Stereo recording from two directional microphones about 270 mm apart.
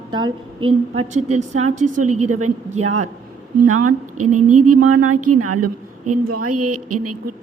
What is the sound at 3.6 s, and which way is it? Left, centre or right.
A woman's voice, right.